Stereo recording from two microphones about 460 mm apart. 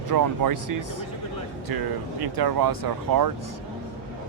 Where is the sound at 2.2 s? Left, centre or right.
Right.